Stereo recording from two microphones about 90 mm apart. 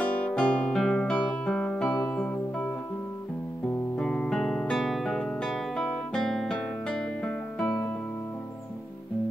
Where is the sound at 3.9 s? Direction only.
10° left (ahead or behind).